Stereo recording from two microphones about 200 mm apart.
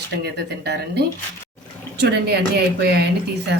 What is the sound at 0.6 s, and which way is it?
Speech, 55° right (ahead or behind).